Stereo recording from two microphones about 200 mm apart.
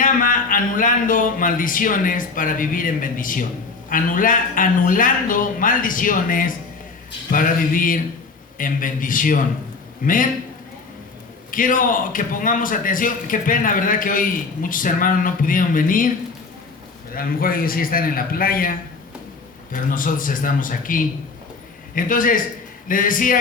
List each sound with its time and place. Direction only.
0.0 s a man's voice: 45° left (ahead or behind)
11.5 s a man's voice: 45° left (ahead or behind)
17.2 s a man's voice: 45° left (ahead or behind)